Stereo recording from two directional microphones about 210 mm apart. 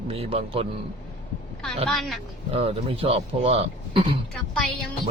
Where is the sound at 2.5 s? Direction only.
25° right (ahead or behind).